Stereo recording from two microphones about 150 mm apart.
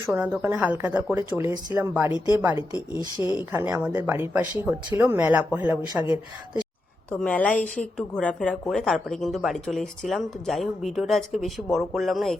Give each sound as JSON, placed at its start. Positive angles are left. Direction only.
{"t": 0.0, "sound": "speech", "side_deg": -15}
{"t": 3.2, "sound": "speech", "side_deg": 25}
{"t": 3.5, "sound": "speech", "side_deg": -10}
{"t": 7.1, "sound": "a woman's voice", "side_deg": 10}